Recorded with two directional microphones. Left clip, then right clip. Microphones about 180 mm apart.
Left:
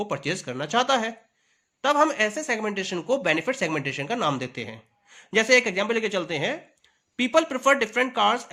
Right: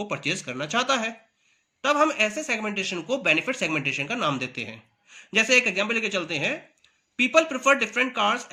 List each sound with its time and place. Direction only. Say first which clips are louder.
0.0 s speech: even; 45° left (ahead or behind)